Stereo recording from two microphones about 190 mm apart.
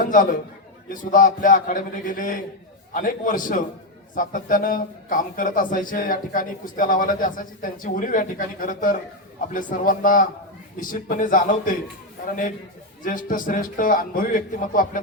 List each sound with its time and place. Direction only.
0.9 s speech: 45° left (ahead or behind)
13.0 s speech: 45° left (ahead or behind)